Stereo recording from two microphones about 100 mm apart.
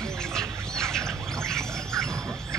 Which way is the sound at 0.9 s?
5° left (ahead or behind).